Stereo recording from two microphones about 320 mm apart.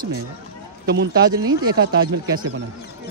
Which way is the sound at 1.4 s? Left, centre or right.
Right.